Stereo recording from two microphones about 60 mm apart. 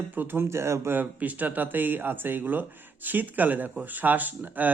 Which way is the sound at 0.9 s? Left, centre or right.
Right.